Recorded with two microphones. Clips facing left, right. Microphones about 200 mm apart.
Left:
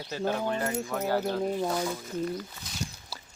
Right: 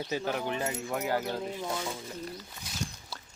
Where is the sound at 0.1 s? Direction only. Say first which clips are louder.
Left 3 dB; 15° right (ahead or behind).